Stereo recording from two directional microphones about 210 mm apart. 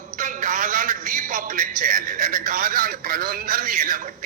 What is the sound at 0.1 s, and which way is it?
A man's voice, 35° right (ahead or behind).